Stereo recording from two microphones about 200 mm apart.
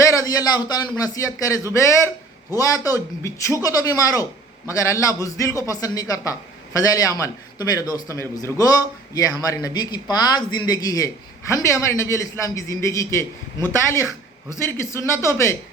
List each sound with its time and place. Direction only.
0.1 s a man's voice: 15° left (ahead or behind)